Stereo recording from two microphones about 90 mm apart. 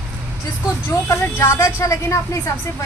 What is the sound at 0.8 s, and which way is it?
A woman's voice, 25° left (ahead or behind).